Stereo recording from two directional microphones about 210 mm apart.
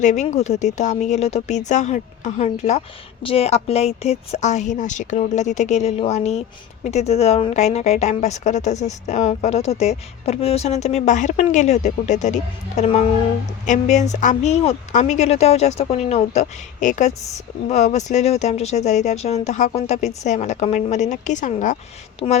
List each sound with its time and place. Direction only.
0.0 s a woman's voice: 35° left (ahead or behind)
22.2 s speech: 20° left (ahead or behind)